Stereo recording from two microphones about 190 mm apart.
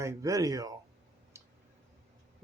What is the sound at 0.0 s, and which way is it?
Speech, 15° right (ahead or behind).